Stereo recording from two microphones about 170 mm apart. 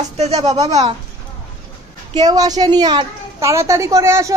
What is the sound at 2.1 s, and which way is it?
A woman's voice, 25° right (ahead or behind).